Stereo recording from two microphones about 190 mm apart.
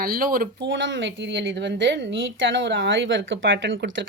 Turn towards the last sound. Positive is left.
turn(degrees=-70)  # may be behind; listen again after turning